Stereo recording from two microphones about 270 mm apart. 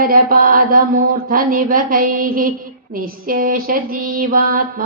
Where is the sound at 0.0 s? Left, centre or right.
Right.